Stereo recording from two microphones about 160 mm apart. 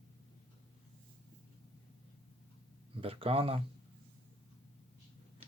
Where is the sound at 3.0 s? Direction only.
35° right (ahead or behind).